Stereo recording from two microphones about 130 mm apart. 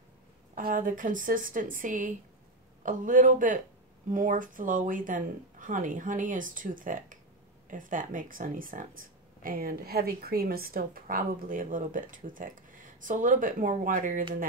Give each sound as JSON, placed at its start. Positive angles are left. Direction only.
{"t": 0.6, "sound": "speech", "side_deg": -90}